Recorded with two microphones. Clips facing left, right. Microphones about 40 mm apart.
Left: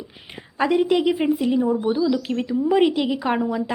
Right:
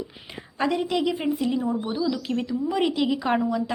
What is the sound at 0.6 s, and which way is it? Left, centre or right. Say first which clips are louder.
A woman's voice: left 5 dB; centre.